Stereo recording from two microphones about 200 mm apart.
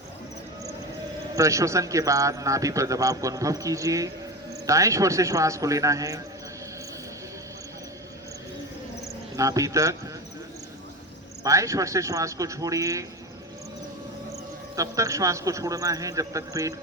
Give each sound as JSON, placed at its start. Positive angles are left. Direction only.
{"t": 1.4, "sound": "a man's voice", "side_deg": -15}
{"t": 9.3, "sound": "a man's voice", "side_deg": -15}
{"t": 11.4, "sound": "a man's voice", "side_deg": -15}
{"t": 14.8, "sound": "a man's voice", "side_deg": -15}